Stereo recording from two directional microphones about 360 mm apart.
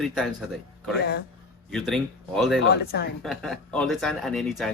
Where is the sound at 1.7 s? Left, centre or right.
Centre.